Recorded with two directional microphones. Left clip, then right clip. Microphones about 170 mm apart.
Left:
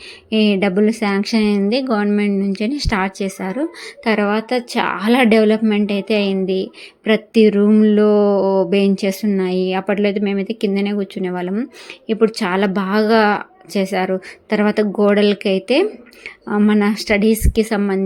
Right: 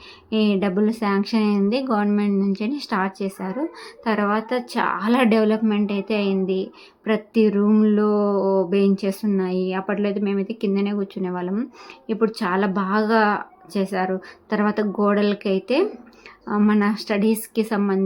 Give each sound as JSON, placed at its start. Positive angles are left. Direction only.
{"t": 0.3, "sound": "a woman's voice", "side_deg": 10}
{"t": 2.9, "sound": "a woman's voice", "side_deg": 20}